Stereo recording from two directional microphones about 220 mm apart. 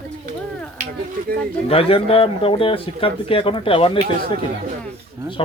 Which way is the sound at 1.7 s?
25° left (ahead or behind).